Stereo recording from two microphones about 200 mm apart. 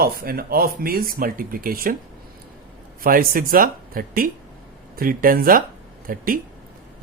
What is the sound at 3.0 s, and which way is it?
Speech, 45° right (ahead or behind).